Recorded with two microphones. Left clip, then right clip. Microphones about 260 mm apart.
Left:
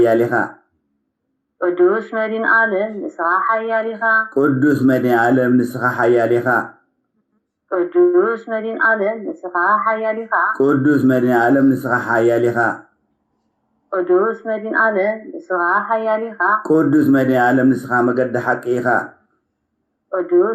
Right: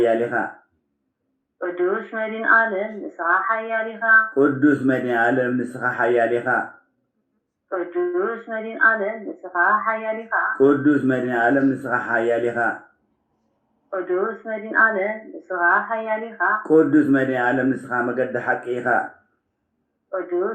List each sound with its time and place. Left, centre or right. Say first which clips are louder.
0.0 s speech: left 5 dB; left
1.5 s speech: left 8 dB; left
7.7 s speech: left 9 dB; left
13.9 s speech: left 7 dB; left
20.1 s speech: left 8 dB; left